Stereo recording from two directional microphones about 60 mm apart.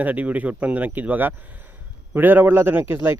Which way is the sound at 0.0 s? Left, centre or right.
Right.